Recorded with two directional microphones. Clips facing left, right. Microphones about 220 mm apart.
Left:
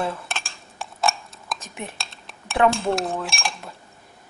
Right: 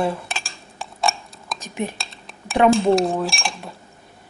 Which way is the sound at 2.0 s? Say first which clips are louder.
Right 2 dB; centre (ahead or behind).